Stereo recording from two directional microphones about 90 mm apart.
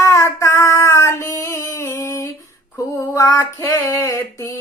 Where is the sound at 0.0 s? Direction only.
35° left (ahead or behind).